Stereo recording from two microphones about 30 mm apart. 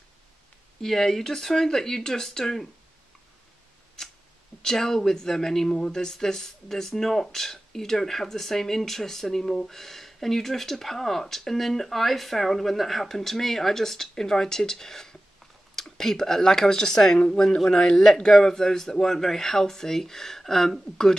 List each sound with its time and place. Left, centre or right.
0.8 s speech: centre
4.6 s a man's voice: centre
18.0 s speech: centre